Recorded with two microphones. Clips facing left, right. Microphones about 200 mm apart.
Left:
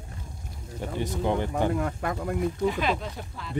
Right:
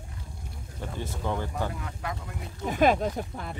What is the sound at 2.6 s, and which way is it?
Speech, 45° right (ahead or behind).